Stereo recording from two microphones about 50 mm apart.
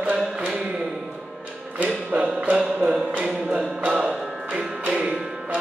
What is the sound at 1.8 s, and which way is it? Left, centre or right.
Music, right.